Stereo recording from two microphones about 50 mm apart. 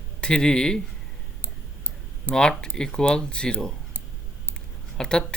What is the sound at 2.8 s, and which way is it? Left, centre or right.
Speech, centre.